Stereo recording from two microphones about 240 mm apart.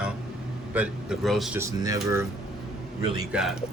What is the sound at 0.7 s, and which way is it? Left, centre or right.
Speech, centre.